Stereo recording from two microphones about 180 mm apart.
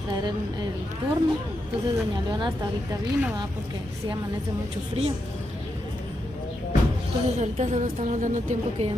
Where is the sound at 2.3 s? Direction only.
25° right (ahead or behind).